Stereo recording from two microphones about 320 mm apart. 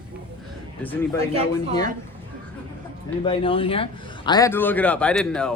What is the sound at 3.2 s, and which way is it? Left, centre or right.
A man's voice, centre.